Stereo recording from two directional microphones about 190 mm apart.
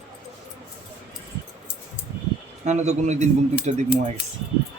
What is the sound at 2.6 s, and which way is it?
Speech, 35° right (ahead or behind).